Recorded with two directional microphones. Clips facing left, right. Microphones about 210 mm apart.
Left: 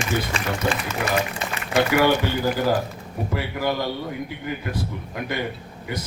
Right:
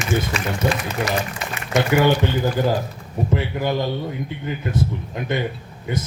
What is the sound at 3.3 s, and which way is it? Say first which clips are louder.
A man's voice: right 2 dB; 20° right (ahead or behind).